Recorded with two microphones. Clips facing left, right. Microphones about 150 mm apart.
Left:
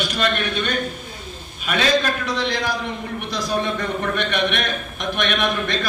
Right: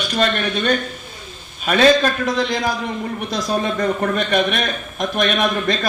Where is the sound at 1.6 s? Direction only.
40° right (ahead or behind).